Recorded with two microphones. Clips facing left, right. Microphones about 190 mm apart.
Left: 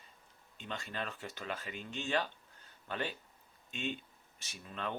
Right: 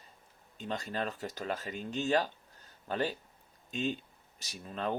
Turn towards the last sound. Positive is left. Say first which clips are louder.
# right 6 dB
turn(degrees=-35)  # may be behind; listen again after turning